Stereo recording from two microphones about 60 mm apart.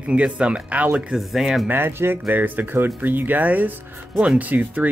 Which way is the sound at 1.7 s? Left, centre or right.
Right.